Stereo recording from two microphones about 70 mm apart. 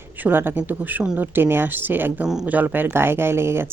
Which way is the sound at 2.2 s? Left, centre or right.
Centre.